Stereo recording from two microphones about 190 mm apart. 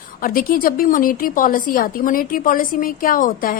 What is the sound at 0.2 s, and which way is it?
A woman's voice, 50° left (ahead or behind).